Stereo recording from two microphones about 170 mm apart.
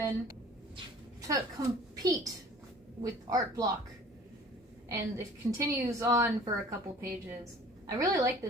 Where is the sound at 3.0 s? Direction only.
20° right (ahead or behind).